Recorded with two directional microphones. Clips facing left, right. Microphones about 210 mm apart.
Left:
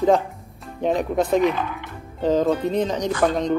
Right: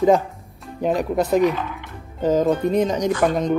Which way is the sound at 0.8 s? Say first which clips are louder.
Right 1 dB; 5° right (ahead or behind).